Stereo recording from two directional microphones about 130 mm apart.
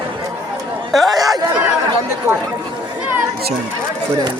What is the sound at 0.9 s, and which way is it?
Speech, centre (ahead or behind).